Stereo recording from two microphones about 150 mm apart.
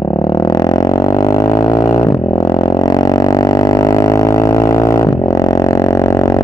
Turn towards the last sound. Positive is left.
turn(degrees=20)  # may be behind; listen again after turning